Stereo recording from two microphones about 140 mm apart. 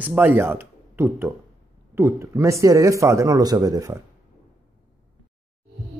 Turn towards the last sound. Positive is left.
turn(degrees=-25)  # may be behind; listen again after turning